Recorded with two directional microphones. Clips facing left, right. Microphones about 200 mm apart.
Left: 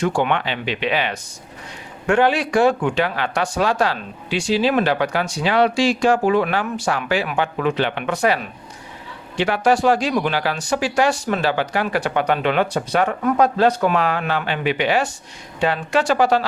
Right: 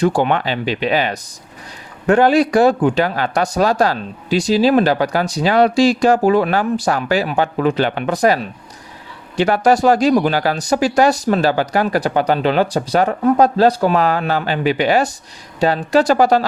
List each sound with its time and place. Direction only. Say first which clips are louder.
0.0 s speech: right 4 dB; 35° right (ahead or behind)